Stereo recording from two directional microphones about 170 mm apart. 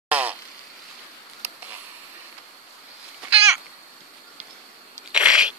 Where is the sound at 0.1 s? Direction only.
10° right (ahead or behind).